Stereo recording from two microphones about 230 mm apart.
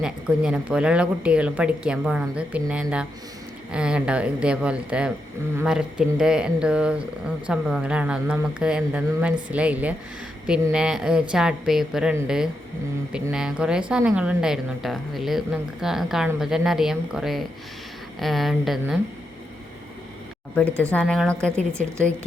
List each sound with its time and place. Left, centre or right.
0.0 s a woman's voice: centre
20.6 s speech: centre